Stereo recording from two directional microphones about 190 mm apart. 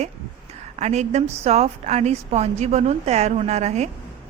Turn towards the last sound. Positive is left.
turn(degrees=-35)  # may be behind; listen again after turning